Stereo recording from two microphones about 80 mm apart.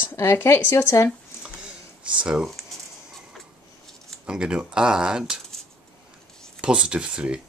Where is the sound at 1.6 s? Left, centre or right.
Centre.